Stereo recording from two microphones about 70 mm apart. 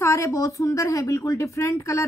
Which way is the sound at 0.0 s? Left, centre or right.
Left.